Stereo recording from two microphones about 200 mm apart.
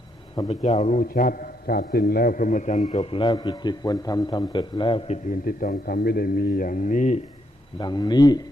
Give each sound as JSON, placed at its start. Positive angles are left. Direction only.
{"t": 0.3, "sound": "a man's voice", "side_deg": 25}
{"t": 7.8, "sound": "speech", "side_deg": 20}